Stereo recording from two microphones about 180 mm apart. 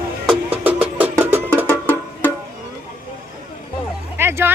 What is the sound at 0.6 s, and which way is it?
Music, 10° right (ahead or behind).